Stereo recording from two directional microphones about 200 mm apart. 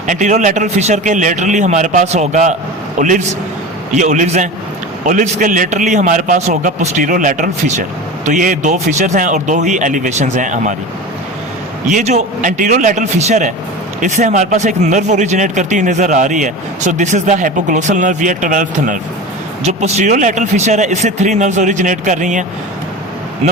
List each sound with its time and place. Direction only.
0.1 s a man's voice: 40° right (ahead or behind)
11.9 s a man's voice: 35° right (ahead or behind)